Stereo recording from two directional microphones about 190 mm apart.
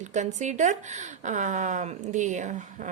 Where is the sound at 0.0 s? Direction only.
40° right (ahead or behind).